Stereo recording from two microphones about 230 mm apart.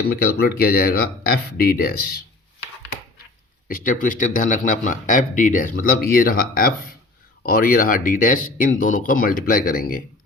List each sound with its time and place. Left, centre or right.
0.1 s speech: left
3.7 s speech: left